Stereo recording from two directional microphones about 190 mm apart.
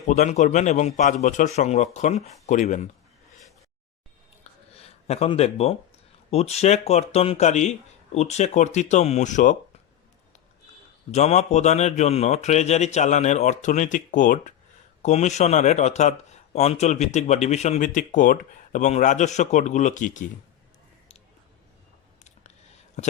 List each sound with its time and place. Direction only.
0.1 s speech: 40° left (ahead or behind)
4.7 s speech: 30° left (ahead or behind)
11.1 s speech: 35° left (ahead or behind)
23.0 s speech: 35° left (ahead or behind)